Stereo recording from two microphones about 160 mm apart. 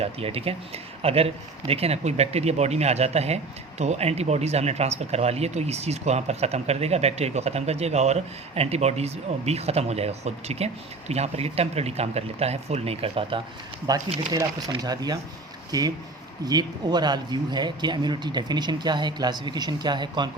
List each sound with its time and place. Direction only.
0.0 s speech: 35° right (ahead or behind)
13.9 s speech: 25° right (ahead or behind)
16.4 s speech: 25° right (ahead or behind)